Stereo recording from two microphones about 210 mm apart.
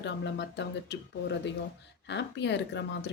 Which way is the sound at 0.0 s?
55° left (ahead or behind).